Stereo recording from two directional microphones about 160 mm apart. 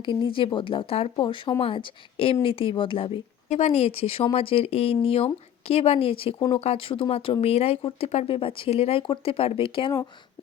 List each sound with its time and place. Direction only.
0.0 s speech: 30° left (ahead or behind)